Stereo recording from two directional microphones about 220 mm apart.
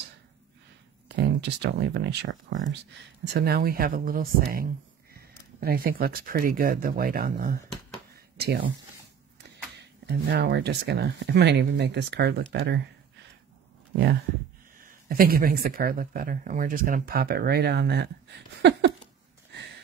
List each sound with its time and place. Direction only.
1.0 s speech: 50° right (ahead or behind)
3.3 s speech: 45° right (ahead or behind)
9.8 s speech: 50° right (ahead or behind)
14.8 s speech: 40° right (ahead or behind)
18.6 s a sound: 50° right (ahead or behind)